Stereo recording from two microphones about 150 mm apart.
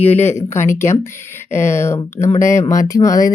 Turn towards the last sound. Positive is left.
turn(degrees=25)  # may be behind; listen again after turning